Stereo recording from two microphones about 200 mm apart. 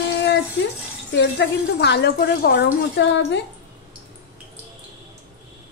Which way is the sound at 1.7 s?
55° left (ahead or behind).